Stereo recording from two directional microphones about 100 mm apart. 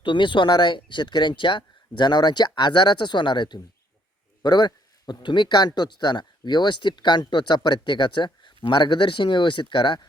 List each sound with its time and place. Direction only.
0.0 s speech: 55° left (ahead or behind)